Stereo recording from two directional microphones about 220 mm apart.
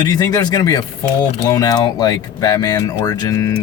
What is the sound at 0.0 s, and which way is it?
Speech, 15° left (ahead or behind).